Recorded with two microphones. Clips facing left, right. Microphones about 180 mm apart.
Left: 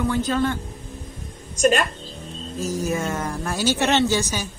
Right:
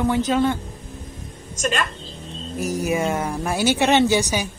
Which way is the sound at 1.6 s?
45° left (ahead or behind).